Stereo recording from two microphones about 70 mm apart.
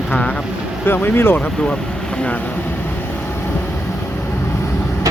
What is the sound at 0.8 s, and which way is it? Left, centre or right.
Speech, left.